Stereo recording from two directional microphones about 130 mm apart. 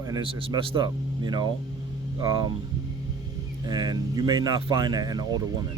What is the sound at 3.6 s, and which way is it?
Speech, 30° right (ahead or behind).